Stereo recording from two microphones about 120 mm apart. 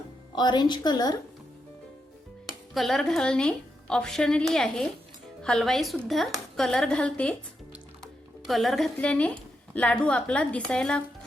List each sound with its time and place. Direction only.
0.3 s a woman's voice: 35° left (ahead or behind)
2.7 s a woman's voice: centre (ahead or behind)